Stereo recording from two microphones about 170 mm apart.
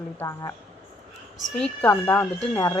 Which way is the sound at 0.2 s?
15° left (ahead or behind).